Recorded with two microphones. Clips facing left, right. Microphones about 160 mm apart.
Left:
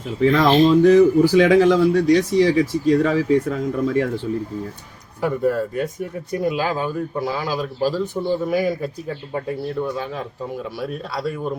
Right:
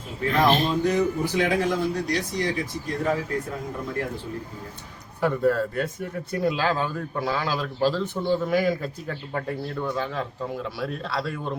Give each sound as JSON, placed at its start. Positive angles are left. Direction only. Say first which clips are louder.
{"t": 0.2, "sound": "speech", "louder": "left 7 dB", "side_deg": 90}
{"t": 5.2, "sound": "a man's voice", "louder": "left 2 dB", "side_deg": 15}
{"t": 10.6, "sound": "a man's voice", "louder": "left 2 dB", "side_deg": 10}